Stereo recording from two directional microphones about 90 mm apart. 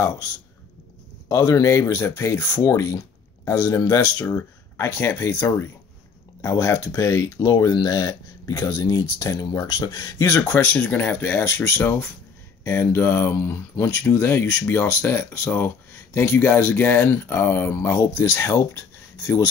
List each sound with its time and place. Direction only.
0.0 s speech: 40° left (ahead or behind)
1.3 s speech: 40° left (ahead or behind)
10.5 s speech: 20° left (ahead or behind); by 19.4 s 35° left (ahead or behind)